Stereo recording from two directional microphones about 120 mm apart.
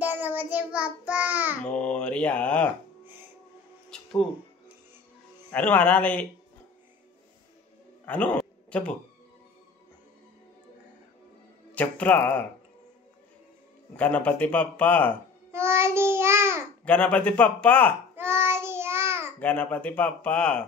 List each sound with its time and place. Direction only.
0.0 s child singing: 15° right (ahead or behind)
1.7 s mantra: 10° left (ahead or behind)
3.9 s music: 5° left (ahead or behind)
5.5 s speech: 10° left (ahead or behind)
8.0 s a sound: 10° left (ahead or behind)
11.7 s speech: 10° left (ahead or behind)
13.9 s speech: 10° left (ahead or behind)
15.5 s child singing: 20° right (ahead or behind)
16.8 s speech: 10° left (ahead or behind)
18.1 s child singing: 20° right (ahead or behind)
19.4 s speech: 10° left (ahead or behind)